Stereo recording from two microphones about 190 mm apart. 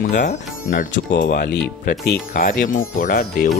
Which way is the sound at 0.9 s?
60° left (ahead or behind).